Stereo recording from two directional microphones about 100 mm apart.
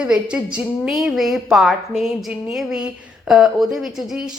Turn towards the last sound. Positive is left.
turn(degrees=-5)  # may be behind; listen again after turning